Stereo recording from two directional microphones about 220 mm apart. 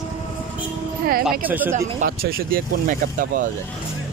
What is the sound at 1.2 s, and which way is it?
Speech, 10° right (ahead or behind).